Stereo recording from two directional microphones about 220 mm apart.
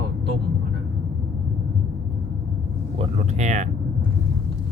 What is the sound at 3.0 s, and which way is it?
Speech, 30° right (ahead or behind).